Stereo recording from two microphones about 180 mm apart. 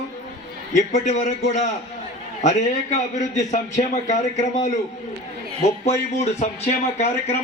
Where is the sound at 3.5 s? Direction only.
40° left (ahead or behind).